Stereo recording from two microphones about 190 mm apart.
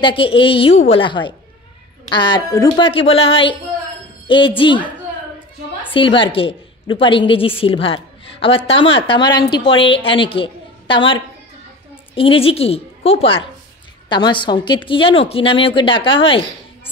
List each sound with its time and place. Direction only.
0.0 s a woman's voice: 25° left (ahead or behind)
2.9 s a woman's voice: 30° left (ahead or behind)
5.9 s a woman's voice: 25° left (ahead or behind)